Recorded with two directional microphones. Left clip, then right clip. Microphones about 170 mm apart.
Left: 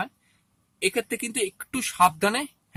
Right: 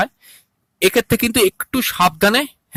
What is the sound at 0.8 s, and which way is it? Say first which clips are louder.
Speech: right 11 dB; 50° right (ahead or behind).